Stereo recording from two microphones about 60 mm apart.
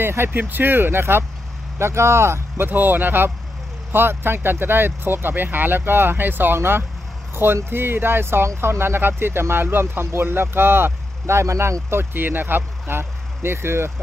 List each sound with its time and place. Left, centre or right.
0.0 s speech: right